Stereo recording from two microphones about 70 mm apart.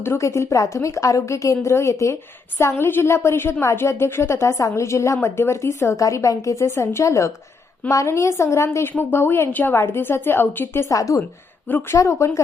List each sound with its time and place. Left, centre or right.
0.0 s speech: left
2.6 s speech: left
10.8 s speech: left